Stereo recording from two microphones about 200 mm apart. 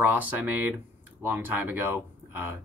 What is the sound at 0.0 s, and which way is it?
Speech, 10° right (ahead or behind).